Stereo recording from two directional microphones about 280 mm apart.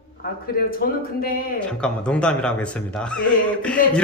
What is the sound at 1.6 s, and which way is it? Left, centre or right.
Speech, centre.